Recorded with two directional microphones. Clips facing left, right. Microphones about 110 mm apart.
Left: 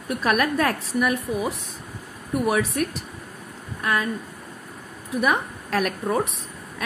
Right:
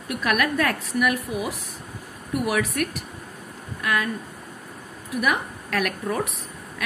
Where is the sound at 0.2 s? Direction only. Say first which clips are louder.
Left 1 dB; 30° left (ahead or behind).